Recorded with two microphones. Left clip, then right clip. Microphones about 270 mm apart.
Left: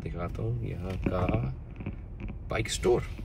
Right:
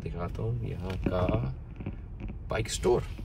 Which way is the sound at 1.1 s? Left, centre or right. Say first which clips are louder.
Right 1 dB; centre.